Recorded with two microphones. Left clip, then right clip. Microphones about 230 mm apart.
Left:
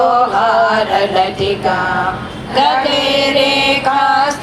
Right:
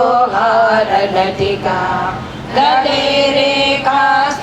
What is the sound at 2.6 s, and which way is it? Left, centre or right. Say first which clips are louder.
Chant: right 1 dB; left.